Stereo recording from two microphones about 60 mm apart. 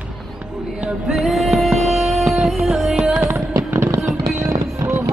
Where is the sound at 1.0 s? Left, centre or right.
Centre.